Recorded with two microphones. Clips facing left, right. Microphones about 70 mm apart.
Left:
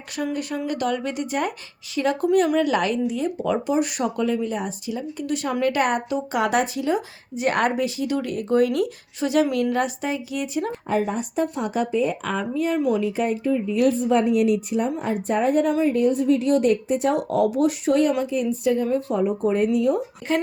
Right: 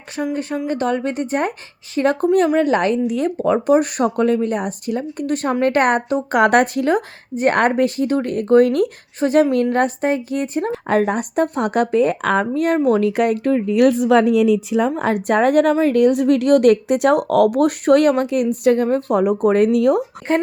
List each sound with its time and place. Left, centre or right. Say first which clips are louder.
0.2 s speech: right 4 dB; right
3.1 s speech: right 5 dB; right
3.3 s speech: right 9 dB; right
10.7 s speech: right 9 dB; right
20.3 s speech: right 5 dB; right